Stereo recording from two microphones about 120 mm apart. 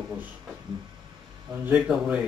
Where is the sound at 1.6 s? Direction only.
10° right (ahead or behind).